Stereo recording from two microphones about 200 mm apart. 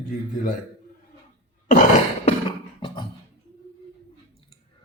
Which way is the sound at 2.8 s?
25° left (ahead or behind).